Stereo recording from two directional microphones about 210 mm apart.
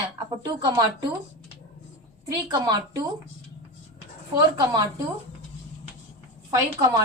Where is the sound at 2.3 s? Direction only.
20° right (ahead or behind).